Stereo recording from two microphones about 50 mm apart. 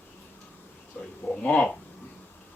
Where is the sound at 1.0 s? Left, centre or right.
Left.